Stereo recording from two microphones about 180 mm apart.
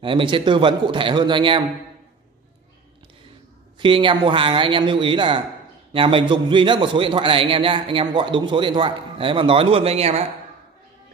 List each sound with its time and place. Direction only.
0.0 s a man's voice: 25° right (ahead or behind)
3.8 s a man's voice: 30° right (ahead or behind)